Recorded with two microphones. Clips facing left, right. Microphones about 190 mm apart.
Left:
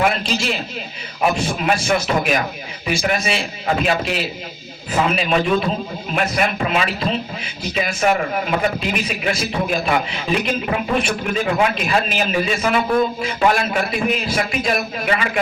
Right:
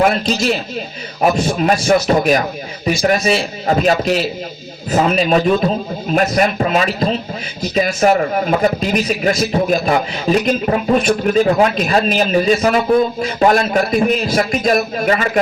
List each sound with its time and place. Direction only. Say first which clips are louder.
0.0 s a man's voice: right 5 dB; 40° right (ahead or behind)